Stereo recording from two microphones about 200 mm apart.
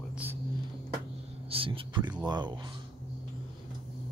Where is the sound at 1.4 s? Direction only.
25° right (ahead or behind).